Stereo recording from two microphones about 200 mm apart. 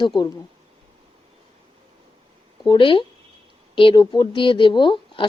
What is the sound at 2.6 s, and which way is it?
A woman's voice, 20° left (ahead or behind).